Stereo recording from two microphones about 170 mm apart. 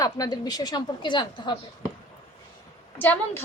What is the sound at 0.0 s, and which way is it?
A woman's voice, 20° left (ahead or behind).